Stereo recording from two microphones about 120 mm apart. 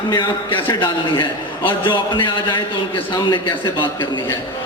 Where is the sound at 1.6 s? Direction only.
45° left (ahead or behind).